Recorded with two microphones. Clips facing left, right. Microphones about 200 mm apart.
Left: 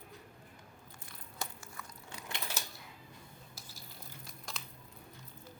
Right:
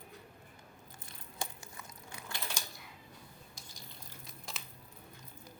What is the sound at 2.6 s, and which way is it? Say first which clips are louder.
Typewriter: left 1 dB; 5° left (ahead or behind).